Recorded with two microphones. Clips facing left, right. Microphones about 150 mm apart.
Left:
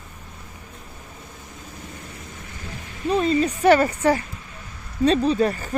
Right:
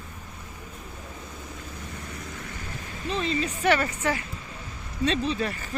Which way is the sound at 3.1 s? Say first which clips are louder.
Left 8 dB; 45° left (ahead or behind).